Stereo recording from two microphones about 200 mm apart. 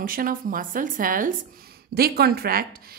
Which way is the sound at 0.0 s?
45° right (ahead or behind).